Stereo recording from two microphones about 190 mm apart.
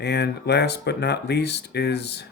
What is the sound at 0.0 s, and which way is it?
Speech, 60° left (ahead or behind).